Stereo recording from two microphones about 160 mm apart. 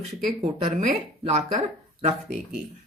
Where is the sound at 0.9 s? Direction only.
50° right (ahead or behind).